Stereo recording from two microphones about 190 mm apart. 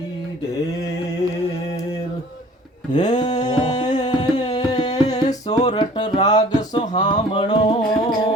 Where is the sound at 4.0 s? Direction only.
20° left (ahead or behind).